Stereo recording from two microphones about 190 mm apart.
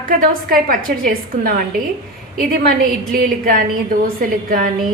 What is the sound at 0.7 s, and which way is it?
A woman's voice, 50° right (ahead or behind).